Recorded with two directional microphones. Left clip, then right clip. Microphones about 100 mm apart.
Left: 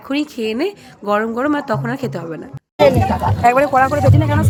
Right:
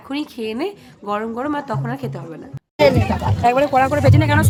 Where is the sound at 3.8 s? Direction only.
50° right (ahead or behind).